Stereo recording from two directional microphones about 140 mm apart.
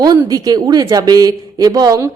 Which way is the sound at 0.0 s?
25° right (ahead or behind).